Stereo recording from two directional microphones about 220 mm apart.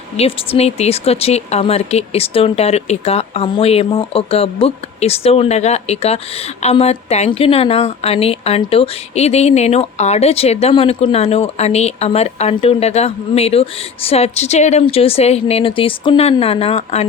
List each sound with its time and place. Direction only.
0.2 s a woman's voice: 25° left (ahead or behind)